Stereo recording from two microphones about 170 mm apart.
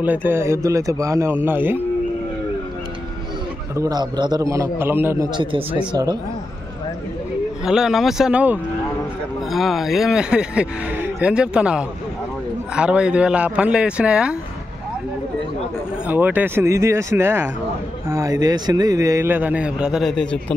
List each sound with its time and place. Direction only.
0.0 s a man's voice: 10° right (ahead or behind)
3.7 s a man's voice: 20° right (ahead or behind)
5.3 s a man's voice: 30° right (ahead or behind)
7.6 s a man's voice: 5° right (ahead or behind)
16.1 s a man's voice: 10° right (ahead or behind)